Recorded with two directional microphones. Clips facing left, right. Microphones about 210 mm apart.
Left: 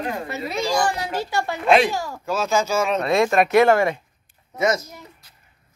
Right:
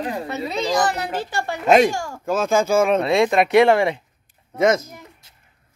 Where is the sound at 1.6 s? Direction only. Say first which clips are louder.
Right 3 dB; 45° right (ahead or behind).